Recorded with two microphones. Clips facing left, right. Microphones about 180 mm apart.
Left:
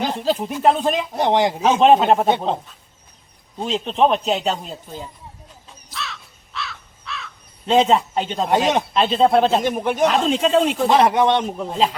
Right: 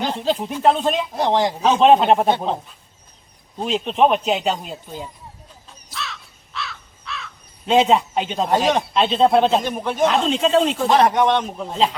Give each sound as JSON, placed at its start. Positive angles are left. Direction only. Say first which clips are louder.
{"t": 0.0, "sound": "speech", "louder": "left 1 dB", "side_deg": 5}
{"t": 1.1, "sound": "speech", "louder": "left 2 dB", "side_deg": 20}
{"t": 1.5, "sound": "speech", "louder": "right 1 dB", "side_deg": 5}
{"t": 3.6, "sound": "speech", "louder": "right 1 dB", "side_deg": -5}
{"t": 5.9, "sound": "crow", "louder": "even", "side_deg": 0}
{"t": 9.6, "sound": "speech", "louder": "left 4 dB", "side_deg": 15}
{"t": 10.0, "sound": "speech", "louder": "right 1 dB", "side_deg": 0}
{"t": 11.0, "sound": "speech", "louder": "left 1 dB", "side_deg": 25}
{"t": 11.5, "sound": "speech", "louder": "even", "side_deg": 5}